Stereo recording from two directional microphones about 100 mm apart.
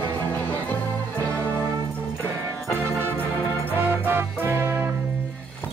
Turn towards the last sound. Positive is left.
turn(degrees=-25)  # may be behind; listen again after turning